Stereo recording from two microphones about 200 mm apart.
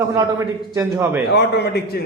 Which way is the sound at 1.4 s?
55° left (ahead or behind).